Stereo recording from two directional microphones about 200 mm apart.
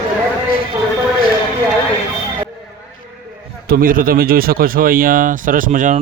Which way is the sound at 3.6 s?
45° right (ahead or behind).